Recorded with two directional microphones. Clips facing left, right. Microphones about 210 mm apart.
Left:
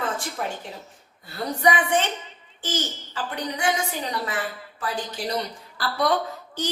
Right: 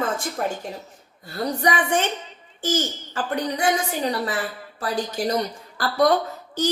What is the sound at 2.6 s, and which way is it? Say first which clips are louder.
A woman's voice: right 5 dB; 45° right (ahead or behind).